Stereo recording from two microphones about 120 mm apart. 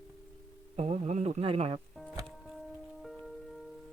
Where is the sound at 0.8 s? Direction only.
65° right (ahead or behind).